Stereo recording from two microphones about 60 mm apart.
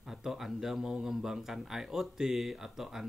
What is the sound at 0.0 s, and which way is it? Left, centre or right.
Speech, centre.